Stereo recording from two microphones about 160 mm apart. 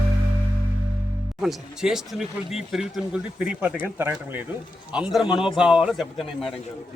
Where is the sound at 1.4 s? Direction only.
5° right (ahead or behind).